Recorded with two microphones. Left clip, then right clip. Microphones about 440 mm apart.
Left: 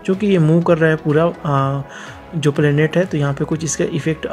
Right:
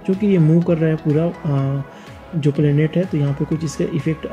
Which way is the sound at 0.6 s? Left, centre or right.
Centre.